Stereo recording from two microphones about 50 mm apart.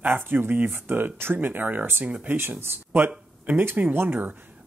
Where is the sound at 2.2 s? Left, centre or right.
Right.